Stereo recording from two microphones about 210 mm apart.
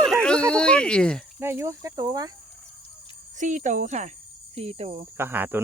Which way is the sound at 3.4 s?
35° right (ahead or behind).